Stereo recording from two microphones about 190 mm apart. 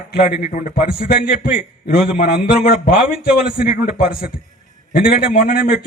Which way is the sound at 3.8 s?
50° left (ahead or behind).